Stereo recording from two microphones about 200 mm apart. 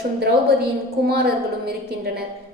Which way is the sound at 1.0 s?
50° right (ahead or behind).